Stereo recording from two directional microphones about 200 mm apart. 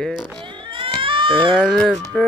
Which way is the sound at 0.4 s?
25° right (ahead or behind).